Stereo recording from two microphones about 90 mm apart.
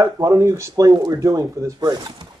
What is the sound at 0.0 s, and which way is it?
Speech, 40° right (ahead or behind).